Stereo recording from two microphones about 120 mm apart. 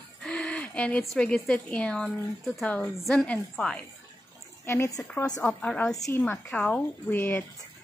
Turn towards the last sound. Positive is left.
turn(degrees=15)  # may be behind; listen again after turning